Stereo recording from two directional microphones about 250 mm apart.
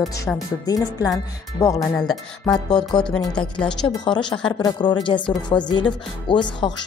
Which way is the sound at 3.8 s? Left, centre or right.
Centre.